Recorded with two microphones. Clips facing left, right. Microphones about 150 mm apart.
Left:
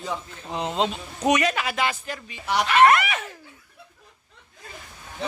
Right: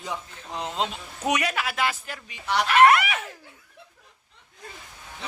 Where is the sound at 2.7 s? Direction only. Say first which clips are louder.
Even; 10° right (ahead or behind).